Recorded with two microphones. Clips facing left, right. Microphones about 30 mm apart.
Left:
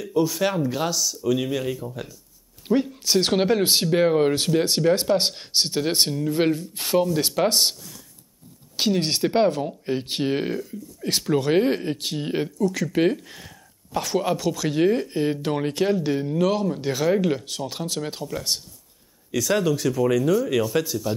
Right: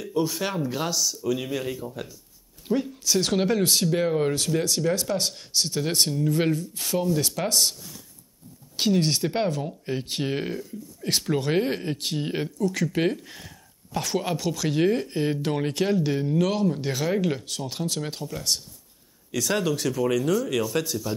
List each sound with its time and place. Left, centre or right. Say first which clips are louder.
0.0 s speech: left 4 dB; centre
2.7 s speech: left 3 dB; left
6.6 s speech: left 5 dB; left
8.7 s speech: even; centre
11.1 s speech: left 3 dB; centre
19.3 s speech: left 3 dB; centre